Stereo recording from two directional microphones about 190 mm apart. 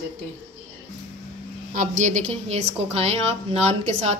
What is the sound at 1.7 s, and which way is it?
A woman's voice, 40° right (ahead or behind).